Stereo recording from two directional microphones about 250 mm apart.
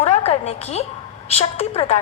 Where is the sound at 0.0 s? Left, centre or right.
Left.